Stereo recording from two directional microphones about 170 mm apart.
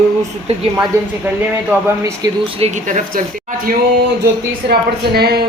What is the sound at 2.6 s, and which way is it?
Speech, 45° right (ahead or behind).